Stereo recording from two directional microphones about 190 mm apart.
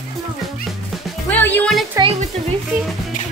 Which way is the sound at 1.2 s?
10° left (ahead or behind).